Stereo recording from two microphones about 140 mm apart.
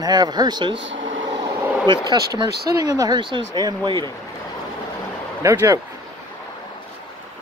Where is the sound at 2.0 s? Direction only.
30° right (ahead or behind).